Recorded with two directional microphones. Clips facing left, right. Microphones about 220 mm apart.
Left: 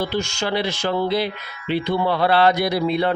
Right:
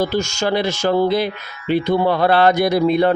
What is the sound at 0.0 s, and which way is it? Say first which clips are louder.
Speech: right 4 dB; 45° right (ahead or behind).